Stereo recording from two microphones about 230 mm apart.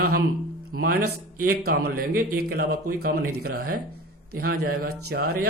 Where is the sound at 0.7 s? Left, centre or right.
Right.